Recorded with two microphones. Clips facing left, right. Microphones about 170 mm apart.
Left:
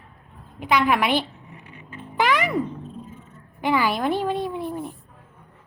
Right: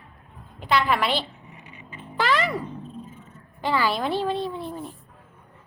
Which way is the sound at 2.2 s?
15° left (ahead or behind).